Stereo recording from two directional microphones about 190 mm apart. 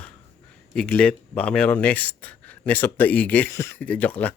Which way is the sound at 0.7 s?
5° left (ahead or behind).